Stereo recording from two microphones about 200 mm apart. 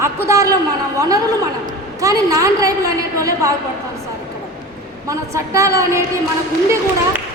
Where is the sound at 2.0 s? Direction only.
15° right (ahead or behind).